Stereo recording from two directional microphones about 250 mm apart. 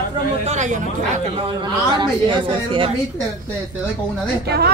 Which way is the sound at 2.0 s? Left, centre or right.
Centre.